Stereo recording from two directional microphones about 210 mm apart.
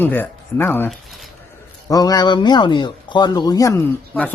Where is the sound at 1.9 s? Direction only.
15° left (ahead or behind).